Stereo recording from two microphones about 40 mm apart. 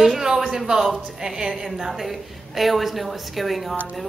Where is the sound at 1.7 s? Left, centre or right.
Centre.